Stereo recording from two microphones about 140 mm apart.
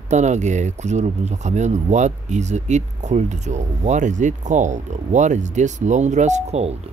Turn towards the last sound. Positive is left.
turn(degrees=-50)  # may be behind; listen again after turning